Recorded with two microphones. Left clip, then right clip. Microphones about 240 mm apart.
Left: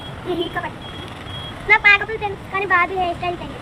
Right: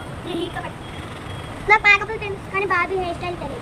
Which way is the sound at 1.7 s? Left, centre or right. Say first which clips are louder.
Left 1 dB; centre.